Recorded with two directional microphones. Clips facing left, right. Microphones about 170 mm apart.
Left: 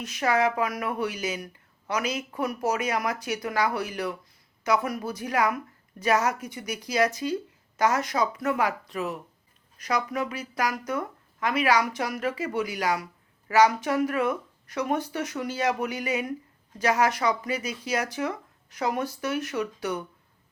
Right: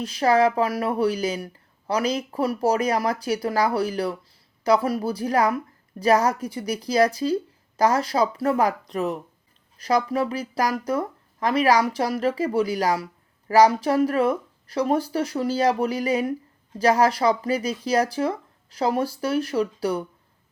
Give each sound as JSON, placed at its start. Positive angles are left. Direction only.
{"t": 0.0, "sound": "speech", "side_deg": -30}